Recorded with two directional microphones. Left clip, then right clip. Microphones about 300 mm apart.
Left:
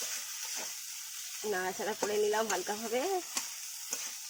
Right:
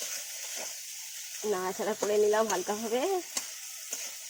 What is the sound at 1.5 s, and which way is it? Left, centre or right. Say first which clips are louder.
Speech: right 3 dB; centre.